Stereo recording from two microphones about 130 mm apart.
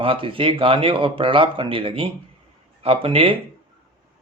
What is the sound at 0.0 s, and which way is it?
A man's voice, 45° right (ahead or behind).